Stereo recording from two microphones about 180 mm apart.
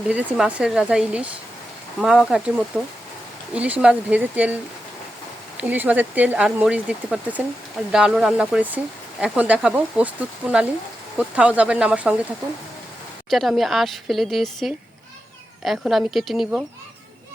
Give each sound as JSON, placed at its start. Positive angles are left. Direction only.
{"t": 0.1, "sound": "a woman's voice", "side_deg": -10}
{"t": 5.5, "sound": "a woman's voice", "side_deg": -10}
{"t": 13.3, "sound": "a woman's voice", "side_deg": 0}